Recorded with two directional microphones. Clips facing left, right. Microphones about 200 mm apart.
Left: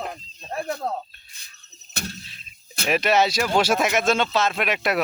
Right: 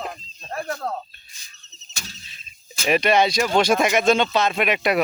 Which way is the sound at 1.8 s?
60° left (ahead or behind).